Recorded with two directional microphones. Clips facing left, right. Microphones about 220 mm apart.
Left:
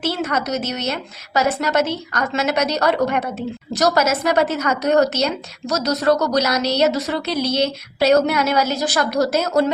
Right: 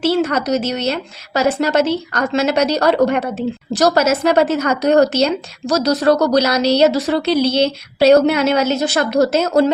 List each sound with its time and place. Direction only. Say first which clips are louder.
0.0 s a woman's voice: right 6 dB; 30° right (ahead or behind)